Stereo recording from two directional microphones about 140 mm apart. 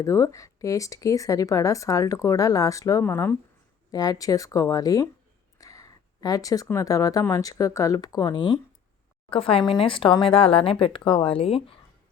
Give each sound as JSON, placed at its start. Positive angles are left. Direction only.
{"t": 0.0, "sound": "speech", "side_deg": 20}
{"t": 3.9, "sound": "a woman's voice", "side_deg": 25}